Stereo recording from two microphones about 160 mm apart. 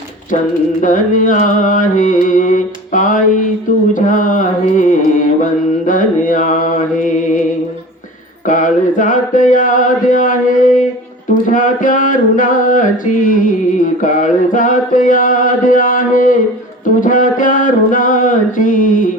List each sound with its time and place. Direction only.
0.8 s mantra: 55° left (ahead or behind)
8.4 s mantra: 55° left (ahead or behind)